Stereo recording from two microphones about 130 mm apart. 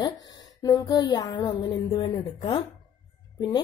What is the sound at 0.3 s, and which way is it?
Speech, 30° left (ahead or behind).